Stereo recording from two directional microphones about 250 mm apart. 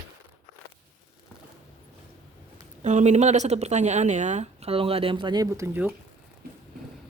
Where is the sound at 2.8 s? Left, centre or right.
Right; by 5.9 s centre.